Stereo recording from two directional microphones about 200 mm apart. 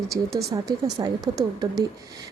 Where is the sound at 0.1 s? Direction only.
15° right (ahead or behind).